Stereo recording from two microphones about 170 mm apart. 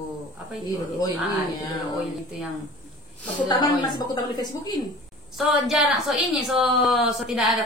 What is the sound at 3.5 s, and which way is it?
A woman's voice, 25° left (ahead or behind).